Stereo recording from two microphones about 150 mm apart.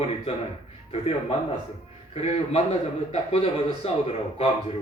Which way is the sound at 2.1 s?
45° left (ahead or behind).